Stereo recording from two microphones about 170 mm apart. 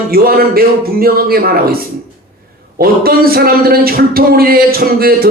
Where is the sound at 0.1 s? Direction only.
60° right (ahead or behind).